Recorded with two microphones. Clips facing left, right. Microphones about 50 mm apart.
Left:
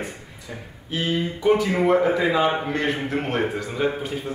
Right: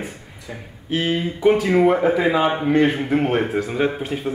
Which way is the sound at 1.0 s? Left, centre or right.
Right.